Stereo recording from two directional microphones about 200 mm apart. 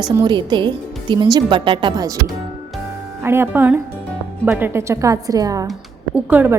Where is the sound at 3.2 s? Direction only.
10° right (ahead or behind).